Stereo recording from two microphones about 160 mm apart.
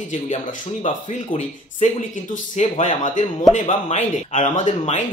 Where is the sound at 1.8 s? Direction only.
50° left (ahead or behind).